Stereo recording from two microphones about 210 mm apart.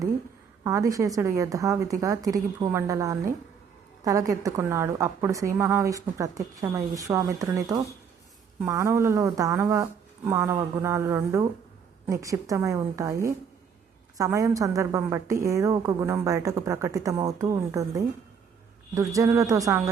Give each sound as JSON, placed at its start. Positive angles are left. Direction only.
{"t": 0.6, "sound": "a woman's voice", "side_deg": -15}